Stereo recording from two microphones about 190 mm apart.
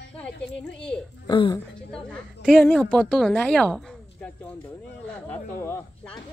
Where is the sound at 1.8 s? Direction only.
5° left (ahead or behind).